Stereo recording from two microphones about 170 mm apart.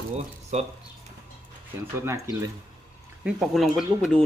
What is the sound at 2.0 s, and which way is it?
Speech, 20° right (ahead or behind).